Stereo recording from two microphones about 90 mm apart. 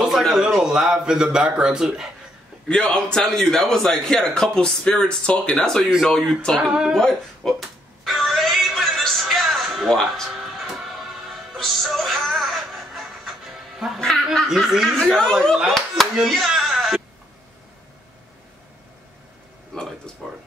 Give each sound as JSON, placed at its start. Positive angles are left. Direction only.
{"t": 0.0, "sound": "a sound", "side_deg": -5}
{"t": 0.6, "sound": "speech", "side_deg": -5}
{"t": 2.7, "sound": "a man's voice", "side_deg": 10}
{"t": 8.0, "sound": "music", "side_deg": 0}
{"t": 11.5, "sound": "music", "side_deg": 0}
{"t": 13.9, "sound": "speech", "side_deg": 5}
{"t": 15.1, "sound": "speech", "side_deg": 10}
{"t": 16.2, "sound": "a sound", "side_deg": 0}
{"t": 20.2, "sound": "speech", "side_deg": 5}